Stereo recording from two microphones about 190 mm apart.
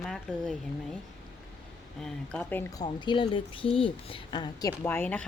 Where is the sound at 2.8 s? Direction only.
25° left (ahead or behind).